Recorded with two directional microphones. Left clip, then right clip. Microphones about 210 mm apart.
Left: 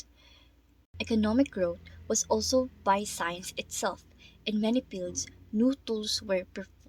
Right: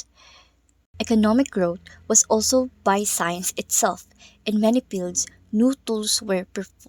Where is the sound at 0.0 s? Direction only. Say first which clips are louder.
Right 9 dB; 50° right (ahead or behind).